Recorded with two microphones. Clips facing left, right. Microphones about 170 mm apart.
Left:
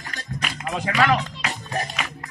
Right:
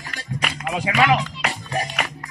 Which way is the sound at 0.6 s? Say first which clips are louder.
Right 2 dB; 10° right (ahead or behind).